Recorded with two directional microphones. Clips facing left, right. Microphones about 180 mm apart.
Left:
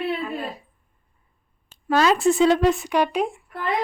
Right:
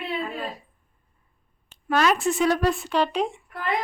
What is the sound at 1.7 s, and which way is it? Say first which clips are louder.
Speech: left 3 dB; 30° left (ahead or behind).